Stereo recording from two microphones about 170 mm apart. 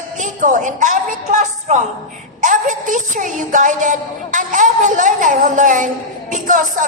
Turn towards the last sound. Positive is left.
turn(degrees=-50)  # may be behind; listen again after turning